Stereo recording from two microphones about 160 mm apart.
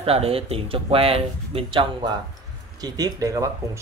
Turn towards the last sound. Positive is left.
turn(degrees=-20)  # may be behind; listen again after turning